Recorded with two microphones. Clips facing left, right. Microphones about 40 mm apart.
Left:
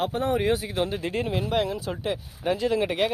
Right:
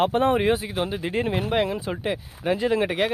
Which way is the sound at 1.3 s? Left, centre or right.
Right.